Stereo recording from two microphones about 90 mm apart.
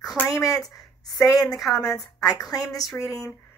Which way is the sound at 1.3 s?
45° left (ahead or behind).